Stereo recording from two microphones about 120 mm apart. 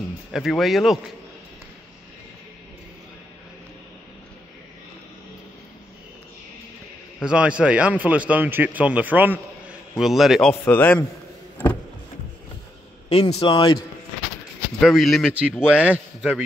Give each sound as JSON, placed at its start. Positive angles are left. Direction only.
{"t": 0.3, "sound": "speech", "side_deg": 0}
{"t": 7.2, "sound": "speech", "side_deg": -10}
{"t": 9.9, "sound": "speech", "side_deg": 0}
{"t": 10.5, "sound": "a man's voice", "side_deg": 20}
{"t": 13.3, "sound": "a man's voice", "side_deg": 45}
{"t": 14.8, "sound": "speech", "side_deg": 0}
{"t": 15.6, "sound": "speech", "side_deg": -10}